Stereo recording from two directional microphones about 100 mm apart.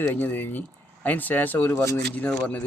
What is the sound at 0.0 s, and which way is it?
Speech, 20° left (ahead or behind).